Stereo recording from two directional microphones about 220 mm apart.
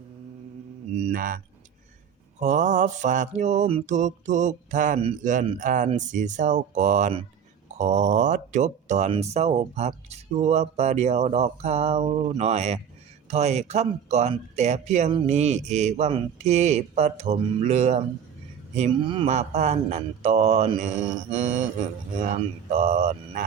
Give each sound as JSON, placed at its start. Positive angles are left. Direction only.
{"t": 0.9, "sound": "speech", "side_deg": -35}
{"t": 2.4, "sound": "speech", "side_deg": -35}